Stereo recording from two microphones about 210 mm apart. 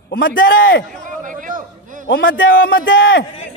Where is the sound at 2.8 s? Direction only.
60° left (ahead or behind).